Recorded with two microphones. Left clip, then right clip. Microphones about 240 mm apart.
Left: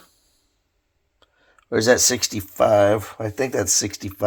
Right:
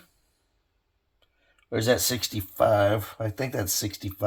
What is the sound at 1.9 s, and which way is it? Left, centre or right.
Speech, left.